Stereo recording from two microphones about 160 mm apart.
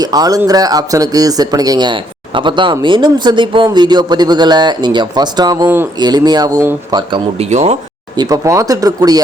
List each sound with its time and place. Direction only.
0.0 s speech: 25° right (ahead or behind)
5.6 s speech: 15° right (ahead or behind)
6.0 s speech: 25° right (ahead or behind)
7.5 s speech: 45° right (ahead or behind)
8.1 s speech: 25° right (ahead or behind)